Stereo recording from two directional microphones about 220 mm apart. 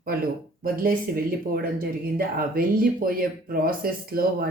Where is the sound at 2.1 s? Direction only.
40° right (ahead or behind).